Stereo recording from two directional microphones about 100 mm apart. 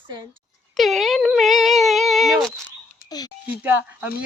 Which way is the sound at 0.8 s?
Centre (ahead or behind).